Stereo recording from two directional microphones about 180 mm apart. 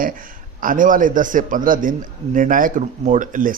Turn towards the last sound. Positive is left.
turn(degrees=-45)  # may be behind; listen again after turning